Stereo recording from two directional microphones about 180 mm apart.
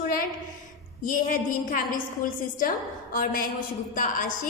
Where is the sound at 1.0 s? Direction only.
50° left (ahead or behind).